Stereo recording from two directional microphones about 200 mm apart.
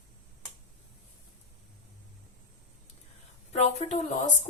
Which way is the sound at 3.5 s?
35° left (ahead or behind).